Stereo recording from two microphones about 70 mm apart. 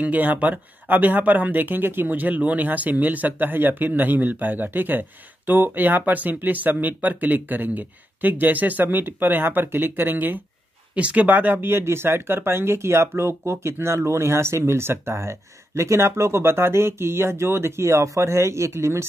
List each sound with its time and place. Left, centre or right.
0.0 s speech: right